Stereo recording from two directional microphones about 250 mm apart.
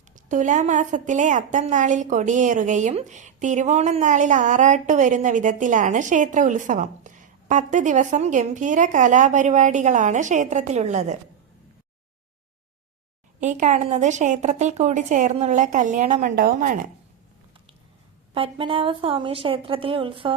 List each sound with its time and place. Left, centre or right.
0.3 s a woman's voice: right
13.4 s a woman's voice: right
18.3 s a woman's voice: right